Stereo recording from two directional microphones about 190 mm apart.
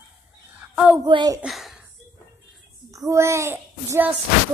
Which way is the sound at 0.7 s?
5° right (ahead or behind).